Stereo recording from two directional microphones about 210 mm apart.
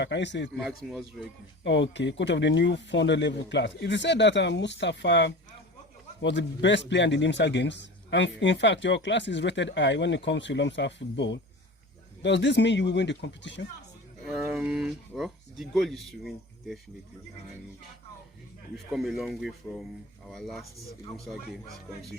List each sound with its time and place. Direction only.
0.0 s a man's voice: 55° left (ahead or behind)
0.5 s speech: centre (ahead or behind)
1.6 s a man's voice: 60° left (ahead or behind)
14.3 s speech: centre (ahead or behind)
18.9 s speech: centre (ahead or behind)